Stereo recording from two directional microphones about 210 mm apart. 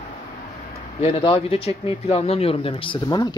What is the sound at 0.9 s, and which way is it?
Speech, 25° left (ahead or behind).